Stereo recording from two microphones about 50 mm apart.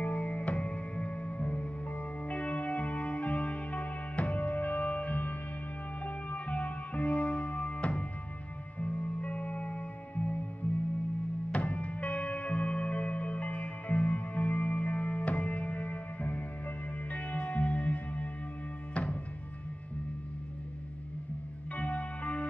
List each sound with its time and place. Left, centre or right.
0.0 s music: left
21.7 s music: left